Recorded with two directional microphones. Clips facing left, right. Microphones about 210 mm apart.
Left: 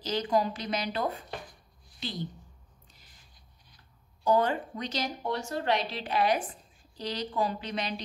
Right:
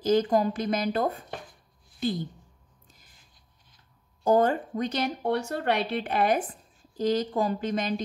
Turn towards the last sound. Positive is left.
turn(degrees=-45)  # may be behind; listen again after turning